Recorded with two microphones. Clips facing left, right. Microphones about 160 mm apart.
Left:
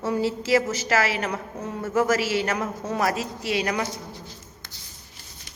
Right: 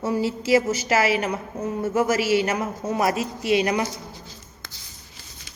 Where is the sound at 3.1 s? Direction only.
20° right (ahead or behind).